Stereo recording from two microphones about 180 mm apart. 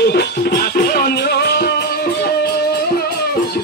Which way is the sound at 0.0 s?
65° left (ahead or behind).